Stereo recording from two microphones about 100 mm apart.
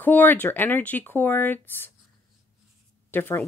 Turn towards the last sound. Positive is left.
turn(degrees=20)  # may be behind; listen again after turning